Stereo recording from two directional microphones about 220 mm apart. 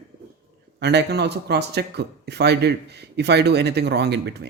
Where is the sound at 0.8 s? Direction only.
50° right (ahead or behind).